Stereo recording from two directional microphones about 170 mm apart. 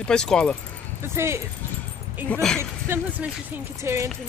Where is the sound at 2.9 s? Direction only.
15° right (ahead or behind).